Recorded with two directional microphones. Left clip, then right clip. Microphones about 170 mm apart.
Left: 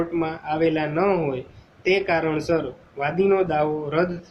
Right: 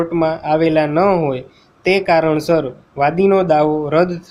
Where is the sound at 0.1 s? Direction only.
65° right (ahead or behind).